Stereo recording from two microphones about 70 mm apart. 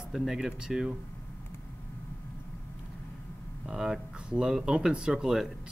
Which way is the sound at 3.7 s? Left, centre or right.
Centre.